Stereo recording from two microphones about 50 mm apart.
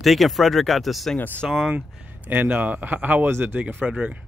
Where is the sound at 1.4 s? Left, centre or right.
Centre.